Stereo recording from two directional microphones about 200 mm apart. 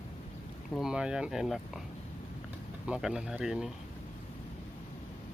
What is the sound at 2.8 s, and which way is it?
Speech, 5° right (ahead or behind).